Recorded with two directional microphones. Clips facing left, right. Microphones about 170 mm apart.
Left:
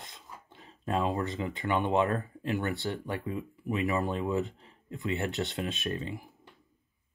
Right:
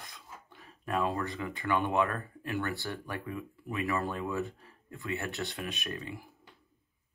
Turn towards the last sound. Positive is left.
turn(degrees=25)  # may be behind; listen again after turning